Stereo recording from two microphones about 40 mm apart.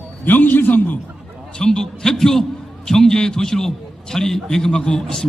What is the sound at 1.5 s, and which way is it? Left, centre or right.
A man's voice, centre.